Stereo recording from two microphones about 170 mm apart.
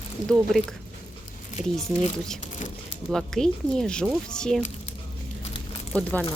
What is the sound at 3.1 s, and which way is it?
Speech, 5° left (ahead or behind).